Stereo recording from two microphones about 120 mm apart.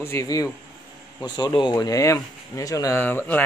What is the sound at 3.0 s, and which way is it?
Speech, 15° left (ahead or behind).